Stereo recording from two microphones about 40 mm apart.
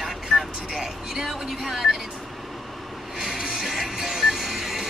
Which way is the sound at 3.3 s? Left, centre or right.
Centre.